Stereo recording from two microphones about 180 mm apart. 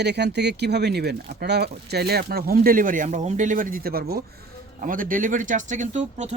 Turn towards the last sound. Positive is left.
turn(degrees=-45)  # may be behind; listen again after turning